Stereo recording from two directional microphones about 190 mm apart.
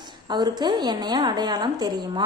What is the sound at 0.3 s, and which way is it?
A woman's voice, 20° right (ahead or behind).